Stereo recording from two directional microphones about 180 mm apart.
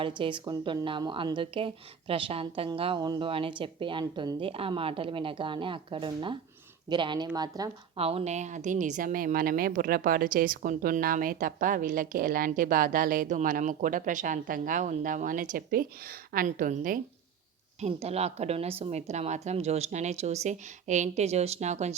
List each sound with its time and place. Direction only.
0.2 s a woman's voice: 25° right (ahead or behind)
7.9 s a woman's voice: 35° right (ahead or behind); by 17.0 s 50° right (ahead or behind)
17.7 s a woman's voice: 35° right (ahead or behind)